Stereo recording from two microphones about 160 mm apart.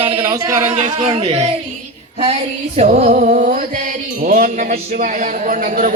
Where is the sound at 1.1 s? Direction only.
40° right (ahead or behind).